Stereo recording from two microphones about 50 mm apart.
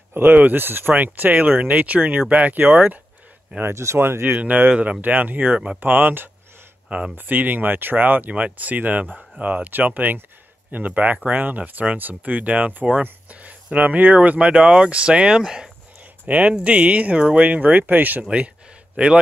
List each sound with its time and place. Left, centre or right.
0.1 s speech: right
3.6 s speech: right
4.4 s speech: right
8.3 s speech: right; by 15.7 s centre
16.3 s speech: right
17.5 s speech: right